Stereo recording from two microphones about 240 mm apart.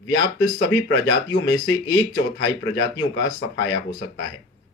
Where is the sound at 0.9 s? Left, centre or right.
Left.